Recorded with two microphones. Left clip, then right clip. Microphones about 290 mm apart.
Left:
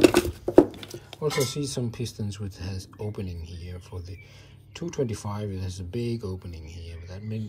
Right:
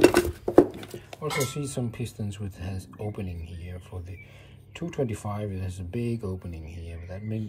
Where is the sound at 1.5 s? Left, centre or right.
Centre.